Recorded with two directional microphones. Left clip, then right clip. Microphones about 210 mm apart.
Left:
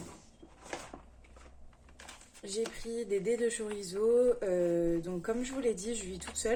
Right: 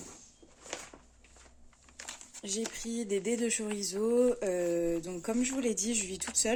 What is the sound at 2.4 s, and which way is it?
Speech, 35° right (ahead or behind).